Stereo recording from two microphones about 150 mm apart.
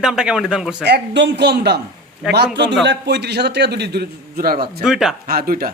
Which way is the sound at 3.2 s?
90° right.